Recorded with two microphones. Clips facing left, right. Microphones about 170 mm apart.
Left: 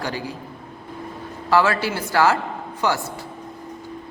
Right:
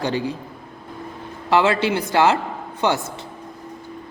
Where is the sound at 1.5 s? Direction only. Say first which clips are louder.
Right 2 dB; 20° right (ahead or behind).